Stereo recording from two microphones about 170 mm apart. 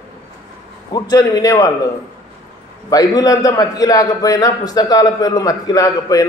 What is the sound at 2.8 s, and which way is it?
A man's voice, 20° left (ahead or behind).